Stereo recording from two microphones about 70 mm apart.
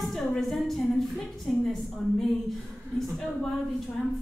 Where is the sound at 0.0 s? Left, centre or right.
Centre.